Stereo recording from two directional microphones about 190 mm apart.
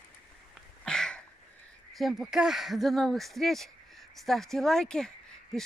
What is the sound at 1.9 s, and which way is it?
Speech, centre (ahead or behind).